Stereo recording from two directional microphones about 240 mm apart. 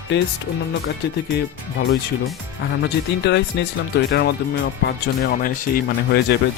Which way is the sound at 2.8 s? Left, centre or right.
Left.